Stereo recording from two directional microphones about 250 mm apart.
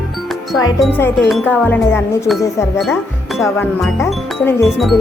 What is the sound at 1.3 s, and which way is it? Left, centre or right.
Speech, centre.